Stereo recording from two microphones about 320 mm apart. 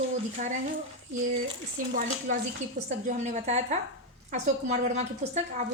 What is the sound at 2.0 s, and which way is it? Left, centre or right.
A woman's voice, right.